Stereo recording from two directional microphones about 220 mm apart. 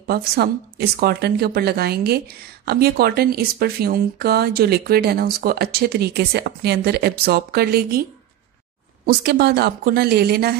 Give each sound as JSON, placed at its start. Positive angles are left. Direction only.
{"t": 0.0, "sound": "a woman's voice", "side_deg": -45}
{"t": 9.0, "sound": "a woman's voice", "side_deg": -45}